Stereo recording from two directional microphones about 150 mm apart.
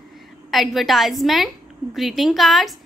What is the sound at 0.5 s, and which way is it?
A woman's voice, centre (ahead or behind).